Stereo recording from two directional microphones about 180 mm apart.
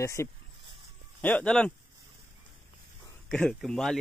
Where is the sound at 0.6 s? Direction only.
30° right (ahead or behind).